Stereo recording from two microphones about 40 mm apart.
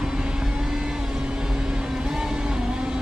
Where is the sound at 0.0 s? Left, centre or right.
Centre.